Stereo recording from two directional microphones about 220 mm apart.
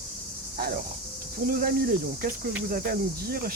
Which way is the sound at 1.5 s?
40° right (ahead or behind).